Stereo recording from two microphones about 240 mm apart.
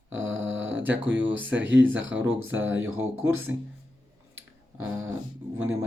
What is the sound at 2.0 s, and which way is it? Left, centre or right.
Speech, right.